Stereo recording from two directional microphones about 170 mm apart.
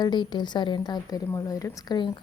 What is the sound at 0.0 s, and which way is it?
A woman's voice, 25° left (ahead or behind).